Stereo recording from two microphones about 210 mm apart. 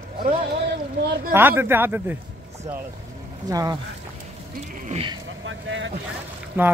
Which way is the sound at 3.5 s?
15° right (ahead or behind).